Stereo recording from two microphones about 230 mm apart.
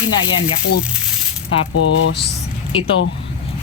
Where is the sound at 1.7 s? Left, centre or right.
Left.